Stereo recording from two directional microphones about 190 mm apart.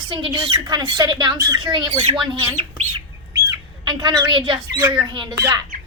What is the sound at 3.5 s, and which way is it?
Speech, 20° right (ahead or behind).